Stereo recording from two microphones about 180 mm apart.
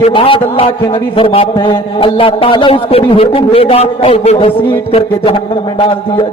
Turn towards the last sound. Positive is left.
turn(degrees=35)  # may be behind; listen again after turning